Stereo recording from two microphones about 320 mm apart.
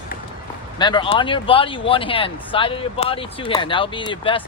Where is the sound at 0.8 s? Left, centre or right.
Centre.